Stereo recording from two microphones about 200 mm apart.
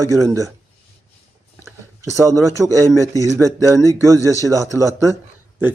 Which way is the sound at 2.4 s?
15° right (ahead or behind).